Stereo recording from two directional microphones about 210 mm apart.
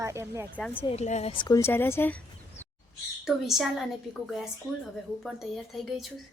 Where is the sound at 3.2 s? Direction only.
Centre (ahead or behind).